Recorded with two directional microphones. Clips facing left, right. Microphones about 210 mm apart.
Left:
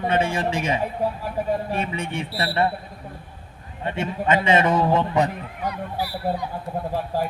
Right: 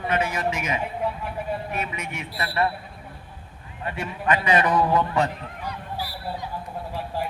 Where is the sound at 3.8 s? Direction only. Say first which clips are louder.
Left 3 dB; 25° left (ahead or behind).